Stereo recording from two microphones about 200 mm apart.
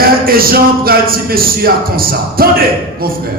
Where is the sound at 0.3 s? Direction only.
45° right (ahead or behind).